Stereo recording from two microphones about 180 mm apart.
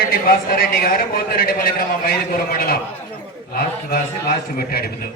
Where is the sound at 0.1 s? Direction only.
55° left (ahead or behind).